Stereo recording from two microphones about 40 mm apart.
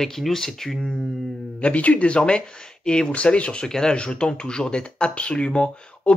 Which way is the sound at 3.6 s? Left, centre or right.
Centre.